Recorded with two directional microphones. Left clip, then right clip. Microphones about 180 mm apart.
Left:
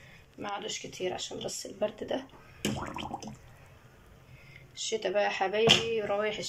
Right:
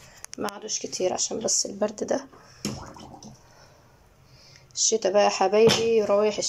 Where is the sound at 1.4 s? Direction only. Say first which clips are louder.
Right 6 dB; centre (ahead or behind).